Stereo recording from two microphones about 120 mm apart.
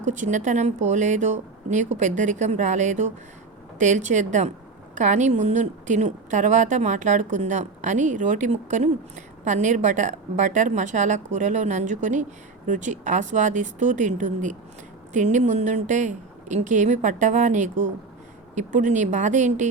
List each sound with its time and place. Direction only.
0.0 s a woman's voice: 85° right